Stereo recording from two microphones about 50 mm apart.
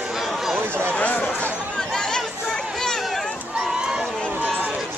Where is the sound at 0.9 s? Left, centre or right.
Left.